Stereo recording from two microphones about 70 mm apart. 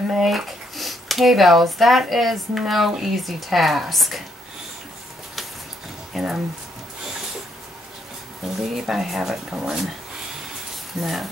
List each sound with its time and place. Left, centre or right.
0.1 s speech: centre
6.1 s speech: centre
8.4 s speech: centre
11.0 s speech: centre